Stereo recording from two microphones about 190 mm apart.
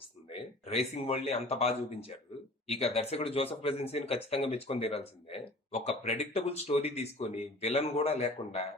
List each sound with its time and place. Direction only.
0.3 s speech: 30° left (ahead or behind)